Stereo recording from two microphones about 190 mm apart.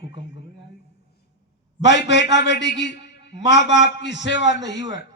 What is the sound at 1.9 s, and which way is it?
A man's voice, 65° left (ahead or behind).